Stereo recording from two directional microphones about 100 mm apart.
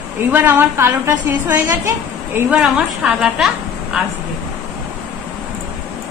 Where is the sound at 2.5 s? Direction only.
10° right (ahead or behind).